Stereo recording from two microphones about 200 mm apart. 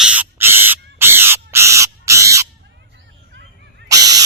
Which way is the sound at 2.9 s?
60° right (ahead or behind).